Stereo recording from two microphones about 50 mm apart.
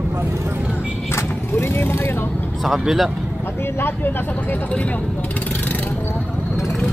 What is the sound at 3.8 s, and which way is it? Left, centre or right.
Speech, left.